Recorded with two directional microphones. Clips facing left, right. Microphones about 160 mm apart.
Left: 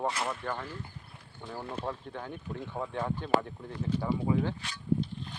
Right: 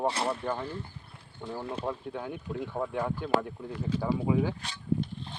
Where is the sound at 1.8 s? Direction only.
10° right (ahead or behind).